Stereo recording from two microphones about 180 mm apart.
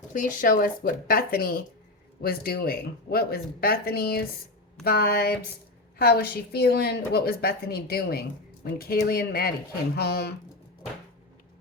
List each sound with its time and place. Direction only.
0.1 s a woman's voice: 50° left (ahead or behind)